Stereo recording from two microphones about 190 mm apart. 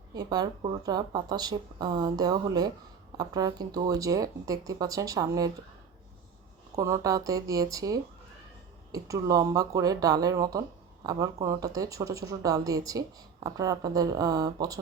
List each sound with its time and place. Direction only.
0.1 s speech: 20° right (ahead or behind)
6.7 s speech: 15° right (ahead or behind)